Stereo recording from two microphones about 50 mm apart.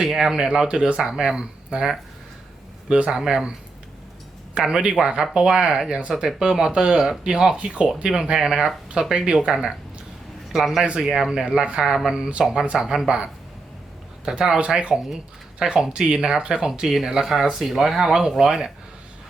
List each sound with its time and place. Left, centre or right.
0.0 s speech: centre
3.1 s speech: centre
4.5 s speech: centre
11.8 s speech: centre
14.6 s speech: right